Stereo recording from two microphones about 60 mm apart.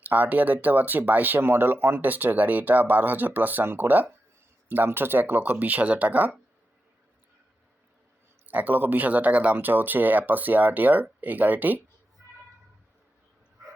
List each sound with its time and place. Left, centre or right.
0.1 s speech: right
8.4 s speech: right